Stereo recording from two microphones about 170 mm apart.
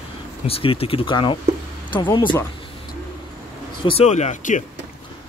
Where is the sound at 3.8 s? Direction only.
35° left (ahead or behind).